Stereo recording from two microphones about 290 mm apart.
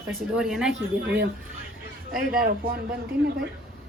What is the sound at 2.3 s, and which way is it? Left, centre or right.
Speech, right.